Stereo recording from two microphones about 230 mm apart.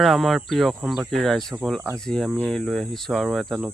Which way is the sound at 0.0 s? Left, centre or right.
Centre.